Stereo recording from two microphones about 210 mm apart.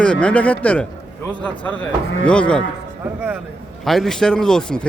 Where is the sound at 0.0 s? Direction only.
5° left (ahead or behind).